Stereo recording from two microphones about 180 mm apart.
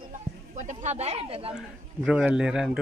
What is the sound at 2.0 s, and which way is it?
Speech, 5° right (ahead or behind).